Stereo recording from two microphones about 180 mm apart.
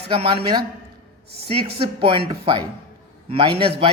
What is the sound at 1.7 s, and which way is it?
A man's voice, 30° right (ahead or behind).